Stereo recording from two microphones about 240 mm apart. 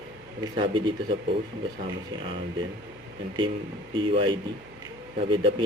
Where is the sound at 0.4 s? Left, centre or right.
Right.